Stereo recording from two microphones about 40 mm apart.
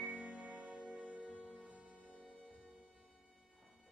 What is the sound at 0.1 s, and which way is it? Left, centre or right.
Music, right.